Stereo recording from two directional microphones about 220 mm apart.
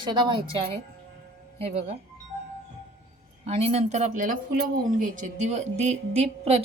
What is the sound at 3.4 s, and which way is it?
A woman's voice, 30° right (ahead or behind).